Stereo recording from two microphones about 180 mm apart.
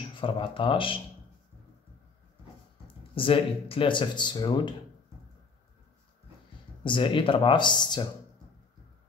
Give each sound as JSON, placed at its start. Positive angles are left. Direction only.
{"t": 0.2, "sound": "speech", "side_deg": 30}
{"t": 3.2, "sound": "speech", "side_deg": 30}
{"t": 6.8, "sound": "speech", "side_deg": 30}